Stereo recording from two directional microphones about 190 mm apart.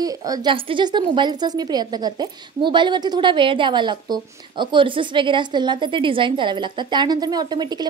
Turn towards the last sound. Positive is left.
turn(degrees=-20)  # may be behind; listen again after turning